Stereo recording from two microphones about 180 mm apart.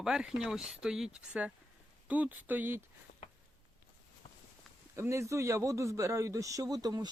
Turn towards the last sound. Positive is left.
turn(degrees=-20)  # may be behind; listen again after turning